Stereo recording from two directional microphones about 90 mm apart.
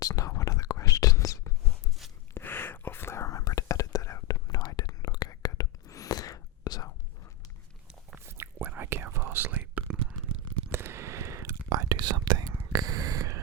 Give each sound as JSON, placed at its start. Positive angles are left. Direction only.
{"t": 0.0, "sound": "whispering", "side_deg": 40}
{"t": 2.3, "sound": "whispering", "side_deg": 25}
{"t": 8.2, "sound": "whispering", "side_deg": -25}
{"t": 9.9, "sound": "a sound", "side_deg": -10}
{"t": 10.7, "sound": "whispering", "side_deg": -25}